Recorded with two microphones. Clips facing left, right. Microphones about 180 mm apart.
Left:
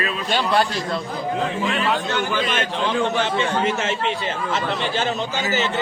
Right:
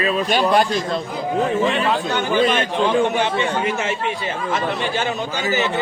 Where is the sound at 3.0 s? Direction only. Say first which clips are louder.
Right 2 dB; 15° right (ahead or behind).